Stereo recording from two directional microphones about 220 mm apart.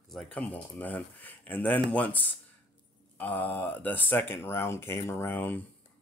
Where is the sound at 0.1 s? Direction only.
5° left (ahead or behind).